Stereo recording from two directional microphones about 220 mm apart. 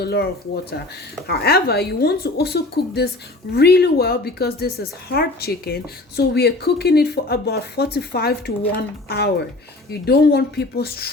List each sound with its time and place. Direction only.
0.0 s a woman's voice: 45° left (ahead or behind)